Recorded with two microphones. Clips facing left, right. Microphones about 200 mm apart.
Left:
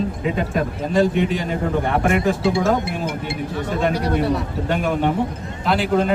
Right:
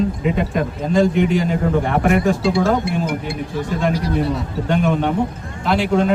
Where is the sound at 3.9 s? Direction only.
60° left (ahead or behind).